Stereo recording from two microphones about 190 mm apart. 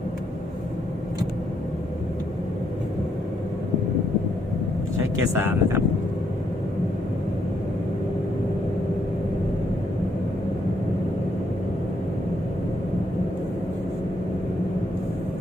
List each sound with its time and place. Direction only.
5.3 s speech: 15° right (ahead or behind)